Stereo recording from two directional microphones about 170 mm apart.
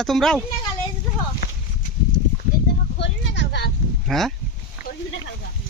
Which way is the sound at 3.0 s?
90° left.